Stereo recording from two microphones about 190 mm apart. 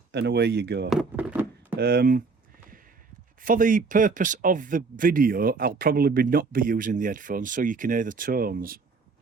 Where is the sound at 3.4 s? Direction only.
45° right (ahead or behind).